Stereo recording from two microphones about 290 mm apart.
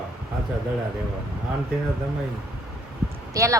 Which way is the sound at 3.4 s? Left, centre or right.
Centre.